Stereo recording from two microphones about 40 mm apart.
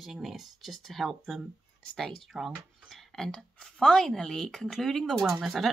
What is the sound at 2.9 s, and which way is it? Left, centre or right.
Speech, centre.